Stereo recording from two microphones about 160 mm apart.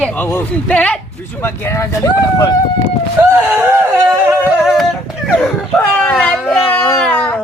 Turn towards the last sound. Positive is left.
turn(degrees=10)  # may be behind; listen again after turning